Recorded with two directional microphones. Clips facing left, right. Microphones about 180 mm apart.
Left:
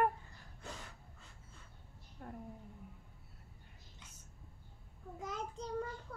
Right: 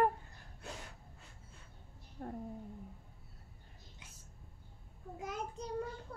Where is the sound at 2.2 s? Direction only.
35° right (ahead or behind).